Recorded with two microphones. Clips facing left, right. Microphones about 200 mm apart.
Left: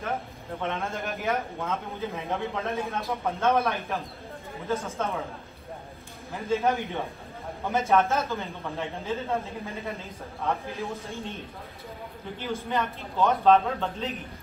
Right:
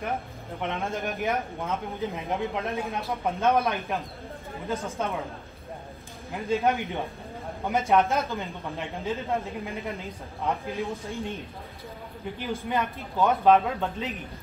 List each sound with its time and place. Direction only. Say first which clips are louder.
0.6 s a man's voice: right 1 dB; 15° right (ahead or behind)
6.3 s a man's voice: right 1 dB; 15° right (ahead or behind)
12.6 s a man's voice: right 2 dB; 10° right (ahead or behind)